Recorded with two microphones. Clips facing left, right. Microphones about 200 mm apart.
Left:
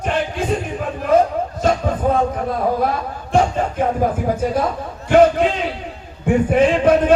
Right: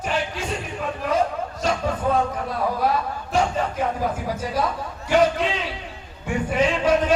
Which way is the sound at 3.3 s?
50° left (ahead or behind).